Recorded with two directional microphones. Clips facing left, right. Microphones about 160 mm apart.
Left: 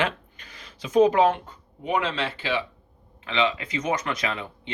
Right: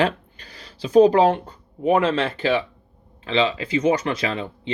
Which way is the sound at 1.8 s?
45° right (ahead or behind).